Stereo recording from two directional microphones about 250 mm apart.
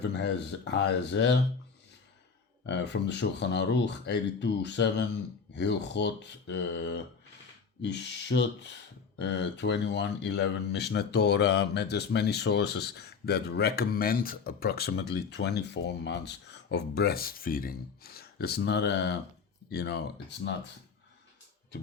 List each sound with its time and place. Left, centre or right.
0.0 s speech: left
2.6 s speech: left